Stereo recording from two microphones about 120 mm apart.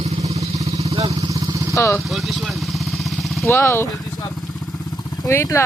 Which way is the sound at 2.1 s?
Centre (ahead or behind).